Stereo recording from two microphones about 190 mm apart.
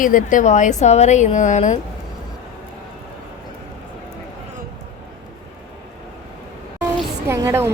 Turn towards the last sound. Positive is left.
turn(degrees=-15)  # may be behind; listen again after turning